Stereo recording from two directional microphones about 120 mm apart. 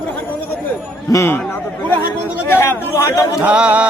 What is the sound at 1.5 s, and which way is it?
Chatter, 15° left (ahead or behind).